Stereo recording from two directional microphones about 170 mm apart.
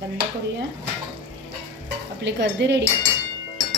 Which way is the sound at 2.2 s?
90° right.